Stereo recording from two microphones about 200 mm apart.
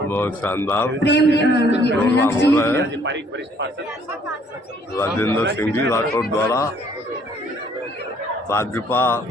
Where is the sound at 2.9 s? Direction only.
60° right (ahead or behind).